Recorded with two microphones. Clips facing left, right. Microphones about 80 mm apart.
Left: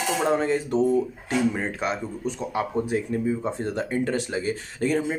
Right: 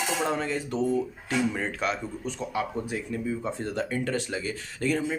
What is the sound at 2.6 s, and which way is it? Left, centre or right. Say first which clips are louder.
Speech: left 6 dB; left.